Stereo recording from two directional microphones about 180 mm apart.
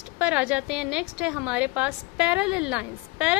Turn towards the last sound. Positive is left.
turn(degrees=-5)  # may be behind; listen again after turning